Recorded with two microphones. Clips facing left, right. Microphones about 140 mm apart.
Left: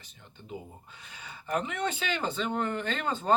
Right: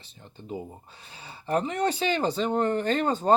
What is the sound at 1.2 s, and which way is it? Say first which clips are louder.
Speech: right 5 dB; 30° right (ahead or behind).